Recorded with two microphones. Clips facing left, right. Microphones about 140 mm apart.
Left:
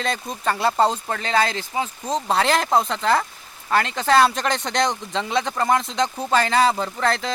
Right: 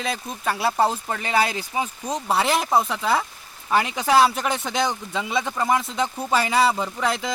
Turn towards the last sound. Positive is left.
turn(degrees=-10)  # may be behind; listen again after turning